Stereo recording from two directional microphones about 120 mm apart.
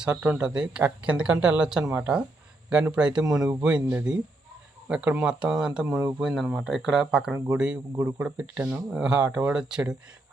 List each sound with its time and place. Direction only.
0.2 s speech: 10° right (ahead or behind)
1.8 s speech: 25° right (ahead or behind)
2.6 s speech: 10° right (ahead or behind)
7.9 s speech: 20° right (ahead or behind); by 10.0 s 5° right (ahead or behind)